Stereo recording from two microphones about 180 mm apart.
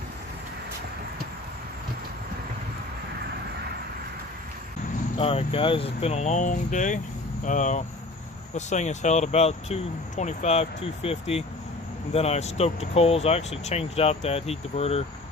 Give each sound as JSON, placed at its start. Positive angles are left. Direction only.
{"t": 5.1, "sound": "speech", "side_deg": 35}